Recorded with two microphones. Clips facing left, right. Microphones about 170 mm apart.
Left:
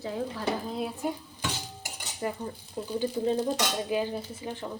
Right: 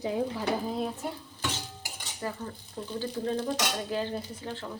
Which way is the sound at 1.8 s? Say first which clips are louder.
Left 5 dB; 20° left (ahead or behind).